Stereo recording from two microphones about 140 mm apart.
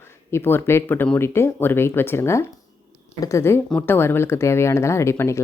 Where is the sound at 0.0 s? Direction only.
15° left (ahead or behind).